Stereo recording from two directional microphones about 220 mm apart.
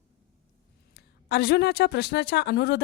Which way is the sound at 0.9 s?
50° left (ahead or behind).